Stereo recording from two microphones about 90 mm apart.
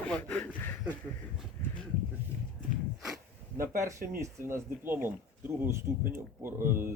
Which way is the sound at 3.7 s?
30° right (ahead or behind).